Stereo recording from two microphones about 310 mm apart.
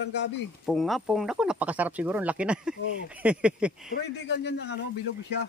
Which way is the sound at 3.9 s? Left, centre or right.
Left.